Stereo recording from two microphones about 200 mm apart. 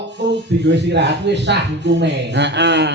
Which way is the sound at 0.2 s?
60° right (ahead or behind).